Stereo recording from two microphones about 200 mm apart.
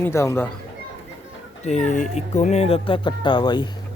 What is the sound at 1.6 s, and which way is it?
Speech, 35° left (ahead or behind).